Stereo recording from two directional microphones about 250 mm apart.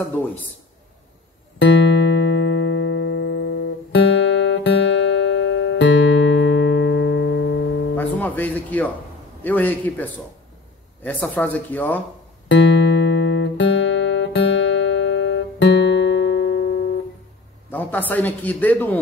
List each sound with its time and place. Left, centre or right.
1.6 s music: left
7.9 s music: centre
9.4 s speech: centre
11.1 s speech: centre
12.4 s music: left
17.6 s a man's voice: centre